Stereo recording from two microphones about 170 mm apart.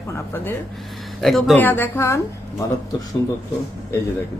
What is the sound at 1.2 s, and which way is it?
Speech, centre (ahead or behind).